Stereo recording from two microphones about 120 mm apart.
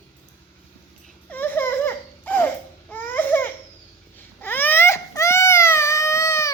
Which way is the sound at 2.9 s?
15° left (ahead or behind).